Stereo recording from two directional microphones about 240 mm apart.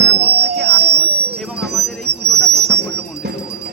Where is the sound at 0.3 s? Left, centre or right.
Right.